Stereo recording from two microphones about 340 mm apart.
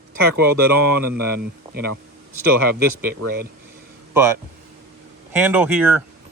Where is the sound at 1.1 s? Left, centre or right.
Right.